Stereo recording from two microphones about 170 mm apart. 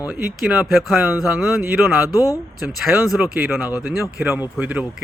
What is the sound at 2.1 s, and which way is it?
Speech, 20° left (ahead or behind).